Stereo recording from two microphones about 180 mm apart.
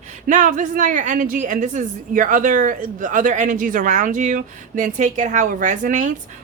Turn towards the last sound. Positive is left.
turn(degrees=-45)  # may be behind; listen again after turning